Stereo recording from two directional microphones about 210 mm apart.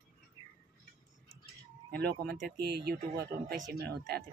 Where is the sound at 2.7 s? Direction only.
50° right (ahead or behind).